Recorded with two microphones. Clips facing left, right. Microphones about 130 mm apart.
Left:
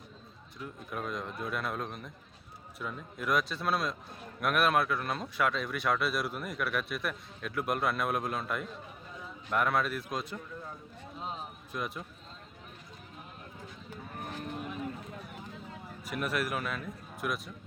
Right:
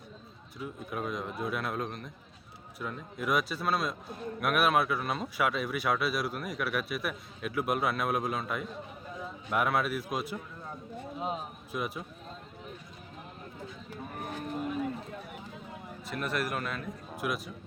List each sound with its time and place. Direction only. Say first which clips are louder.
0.6 s a man's voice: right 3 dB; 5° right (ahead or behind)
16.0 s speech: even; 5° left (ahead or behind)